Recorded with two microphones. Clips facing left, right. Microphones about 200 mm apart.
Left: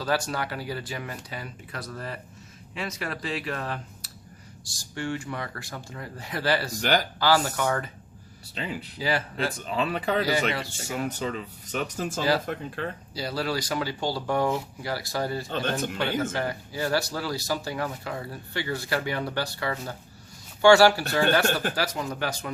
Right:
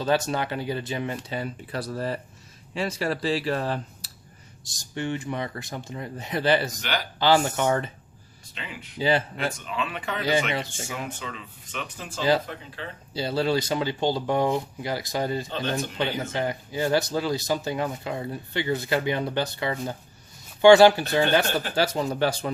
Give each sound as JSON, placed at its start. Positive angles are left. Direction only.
{"t": 0.0, "sound": "speech", "side_deg": -20}
{"t": 4.6, "sound": "speech", "side_deg": -20}
{"t": 6.8, "sound": "speech", "side_deg": 45}
{"t": 7.2, "sound": "speech", "side_deg": -20}
{"t": 8.5, "sound": "speech", "side_deg": 35}
{"t": 9.0, "sound": "speech", "side_deg": -25}
{"t": 9.4, "sound": "speech", "side_deg": 35}
{"t": 13.1, "sound": "speech", "side_deg": -25}